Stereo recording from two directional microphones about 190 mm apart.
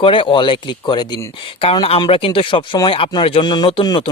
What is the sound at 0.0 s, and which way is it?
Speech, 25° left (ahead or behind).